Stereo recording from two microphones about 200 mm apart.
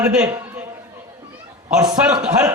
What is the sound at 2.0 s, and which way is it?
Speech, 5° right (ahead or behind).